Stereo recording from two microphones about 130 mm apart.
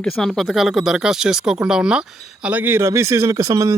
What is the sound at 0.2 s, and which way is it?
Speech, centre (ahead or behind).